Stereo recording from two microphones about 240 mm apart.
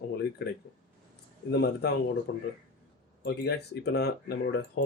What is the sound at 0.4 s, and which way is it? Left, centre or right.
Speech, left.